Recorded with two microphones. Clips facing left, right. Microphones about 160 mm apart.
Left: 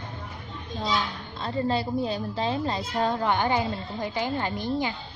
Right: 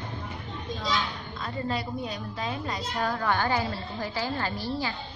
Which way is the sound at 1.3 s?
30° left (ahead or behind).